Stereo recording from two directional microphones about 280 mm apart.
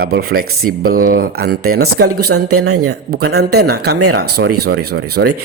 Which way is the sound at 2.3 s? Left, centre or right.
Right.